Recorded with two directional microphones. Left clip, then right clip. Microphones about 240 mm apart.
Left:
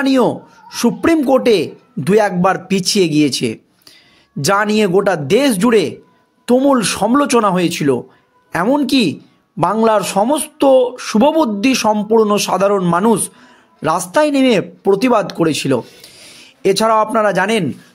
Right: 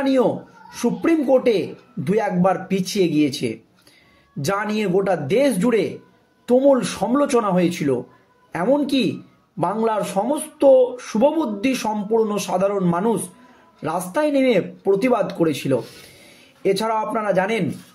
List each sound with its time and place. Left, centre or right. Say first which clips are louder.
0.0 s a man's voice: left 4 dB; left